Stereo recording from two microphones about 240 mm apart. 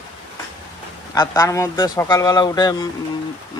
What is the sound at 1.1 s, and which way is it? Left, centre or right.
Speech, centre.